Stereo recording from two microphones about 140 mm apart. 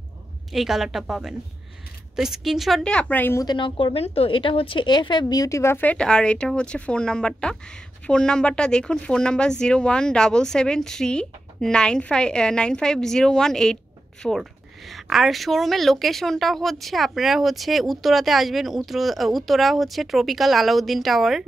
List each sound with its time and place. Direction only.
0.5 s speech: centre (ahead or behind); by 3.4 s 15° left (ahead or behind)
3.4 s speech: 35° left (ahead or behind); by 21.5 s centre (ahead or behind)